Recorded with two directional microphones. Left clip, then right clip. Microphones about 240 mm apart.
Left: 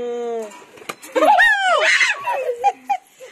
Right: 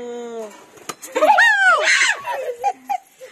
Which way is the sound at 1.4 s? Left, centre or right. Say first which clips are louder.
Right 1 dB; centre.